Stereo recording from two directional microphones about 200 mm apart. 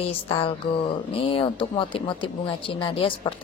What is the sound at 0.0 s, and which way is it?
Speech, 30° left (ahead or behind).